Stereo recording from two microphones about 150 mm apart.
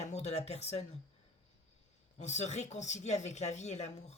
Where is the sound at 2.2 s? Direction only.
50° left (ahead or behind).